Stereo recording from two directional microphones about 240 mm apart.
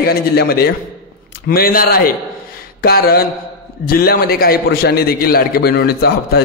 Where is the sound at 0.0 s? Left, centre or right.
Left.